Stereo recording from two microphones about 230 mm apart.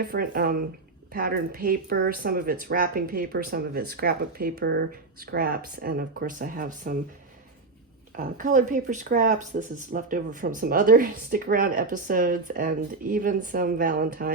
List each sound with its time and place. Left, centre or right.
0.1 s speech: right
8.1 s speech: right